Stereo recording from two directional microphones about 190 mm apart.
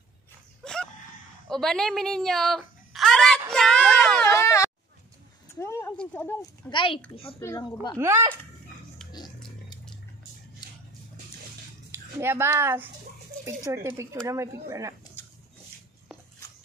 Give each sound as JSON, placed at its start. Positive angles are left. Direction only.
{"t": 0.6, "sound": "a sound", "side_deg": 5}
{"t": 1.5, "sound": "a woman's voice", "side_deg": 0}
{"t": 3.5, "sound": "a sound", "side_deg": 5}
{"t": 5.5, "sound": "speech", "side_deg": 15}
{"t": 6.7, "sound": "a child's voice", "side_deg": 25}
{"t": 8.0, "sound": "speech", "side_deg": -15}
{"t": 11.9, "sound": "speech", "side_deg": -10}